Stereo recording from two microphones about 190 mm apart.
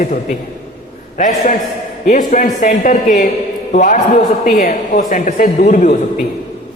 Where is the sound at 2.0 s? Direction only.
45° left (ahead or behind).